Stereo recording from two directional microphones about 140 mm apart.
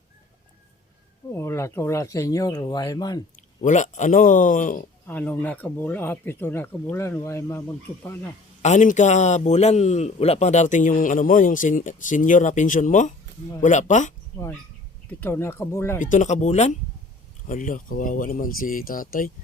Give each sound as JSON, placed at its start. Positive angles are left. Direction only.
{"t": 1.3, "sound": "speech", "side_deg": 20}
{"t": 3.6, "sound": "speech", "side_deg": 60}
{"t": 5.0, "sound": "speech", "side_deg": 15}
{"t": 8.6, "sound": "a man's voice", "side_deg": 60}
{"t": 15.2, "sound": "speech", "side_deg": 15}
{"t": 16.0, "sound": "a man's voice", "side_deg": 65}
{"t": 17.4, "sound": "speech", "side_deg": 65}